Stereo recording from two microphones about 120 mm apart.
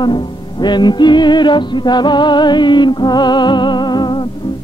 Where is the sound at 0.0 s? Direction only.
40° left (ahead or behind).